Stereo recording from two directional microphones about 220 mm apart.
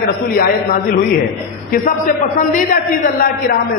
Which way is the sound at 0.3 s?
45° left (ahead or behind).